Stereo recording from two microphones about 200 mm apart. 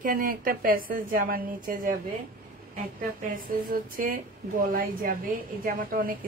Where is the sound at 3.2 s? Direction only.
45° right (ahead or behind).